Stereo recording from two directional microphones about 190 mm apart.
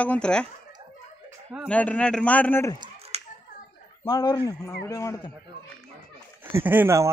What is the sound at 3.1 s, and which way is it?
Hands, 35° right (ahead or behind).